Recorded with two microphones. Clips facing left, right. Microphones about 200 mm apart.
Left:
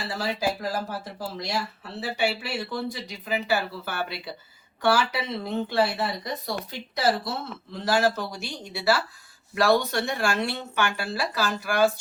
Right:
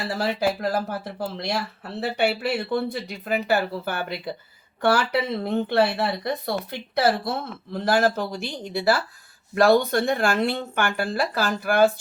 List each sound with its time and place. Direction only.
0.0 s speech: 60° right (ahead or behind)